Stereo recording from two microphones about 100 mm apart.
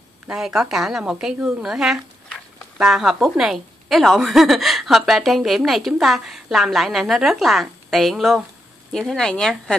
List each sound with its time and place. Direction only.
0.3 s a woman's voice: 5° right (ahead or behind)